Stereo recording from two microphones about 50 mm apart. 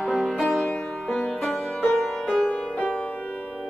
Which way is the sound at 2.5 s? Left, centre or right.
Left.